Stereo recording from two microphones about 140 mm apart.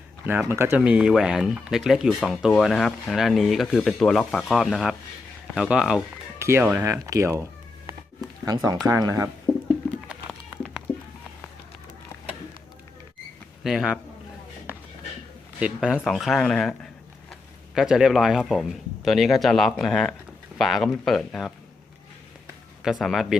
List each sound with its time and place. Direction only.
0.3 s speech: 15° right (ahead or behind)
0.9 s speech: 5° right (ahead or behind); by 7.4 s 20° right (ahead or behind)
8.4 s speech: 25° right (ahead or behind)
10.1 s music: 5° right (ahead or behind)
13.7 s speech: 5° right (ahead or behind)
15.5 s speech: 5° right (ahead or behind)
22.8 s speech: centre (ahead or behind)